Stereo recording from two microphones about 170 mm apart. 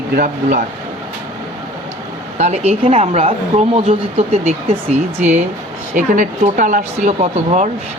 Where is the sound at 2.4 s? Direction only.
40° right (ahead or behind).